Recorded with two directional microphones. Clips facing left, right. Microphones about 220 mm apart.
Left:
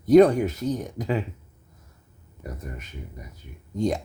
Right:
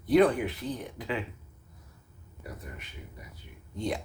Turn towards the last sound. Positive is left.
turn(degrees=45)  # may be behind; listen again after turning